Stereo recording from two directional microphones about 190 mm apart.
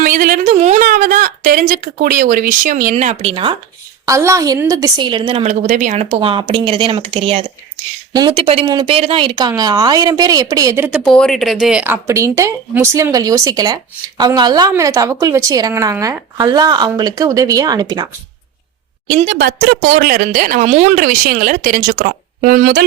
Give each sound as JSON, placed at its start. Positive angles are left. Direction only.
{"t": 0.0, "sound": "a sound", "side_deg": -45}
{"t": 4.0, "sound": "speech", "side_deg": -15}
{"t": 11.0, "sound": "a woman's voice", "side_deg": 5}
{"t": 19.0, "sound": "speech", "side_deg": -45}